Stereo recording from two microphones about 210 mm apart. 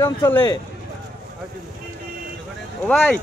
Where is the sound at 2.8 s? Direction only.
5° left (ahead or behind).